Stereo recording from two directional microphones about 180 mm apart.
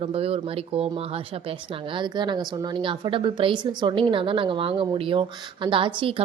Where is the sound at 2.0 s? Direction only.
25° right (ahead or behind).